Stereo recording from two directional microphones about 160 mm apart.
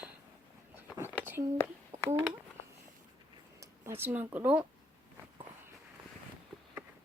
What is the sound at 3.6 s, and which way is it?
Speech, 15° right (ahead or behind).